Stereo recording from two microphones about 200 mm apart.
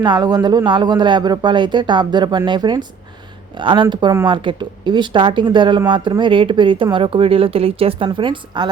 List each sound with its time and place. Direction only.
0.0 s speech: 20° right (ahead or behind)